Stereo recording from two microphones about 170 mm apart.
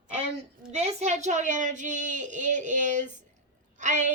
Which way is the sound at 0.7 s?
40° right (ahead or behind).